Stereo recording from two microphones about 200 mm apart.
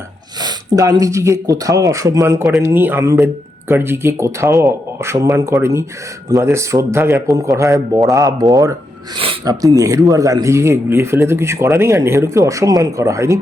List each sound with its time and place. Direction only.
0.4 s a man's voice: 15° right (ahead or behind)